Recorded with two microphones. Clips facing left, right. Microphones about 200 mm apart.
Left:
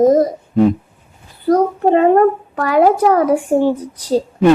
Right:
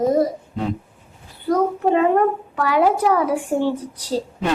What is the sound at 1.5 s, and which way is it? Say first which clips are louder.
A child's voice: left 5 dB; 40° left (ahead or behind).